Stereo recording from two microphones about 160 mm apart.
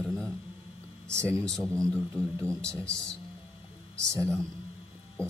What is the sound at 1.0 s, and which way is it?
Speech, 15° right (ahead or behind).